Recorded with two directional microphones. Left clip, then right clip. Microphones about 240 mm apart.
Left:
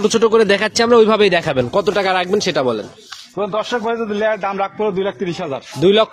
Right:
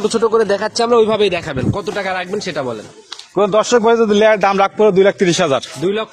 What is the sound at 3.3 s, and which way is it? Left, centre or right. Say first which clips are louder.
A man's voice: right 7 dB; right.